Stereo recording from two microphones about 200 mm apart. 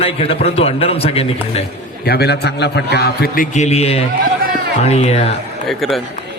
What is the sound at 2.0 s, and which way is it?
A man's voice, 50° left (ahead or behind).